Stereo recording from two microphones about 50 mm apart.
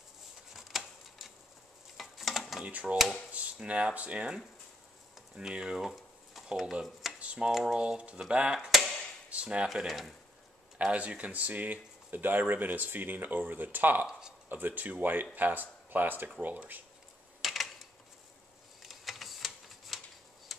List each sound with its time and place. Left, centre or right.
0.5 s a sound: centre
2.6 s speech: right
5.5 s speech: centre
5.8 s stir: centre
6.6 s speech: centre
9.3 s a sound: right
9.8 s speech: centre
10.8 s speech: right
17.4 s a sound: centre
18.8 s typewriter: centre